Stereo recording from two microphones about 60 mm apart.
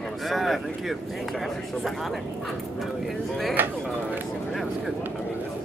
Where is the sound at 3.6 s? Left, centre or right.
Right.